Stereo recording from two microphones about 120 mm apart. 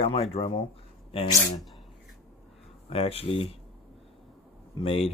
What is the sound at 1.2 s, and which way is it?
Speech, 30° left (ahead or behind).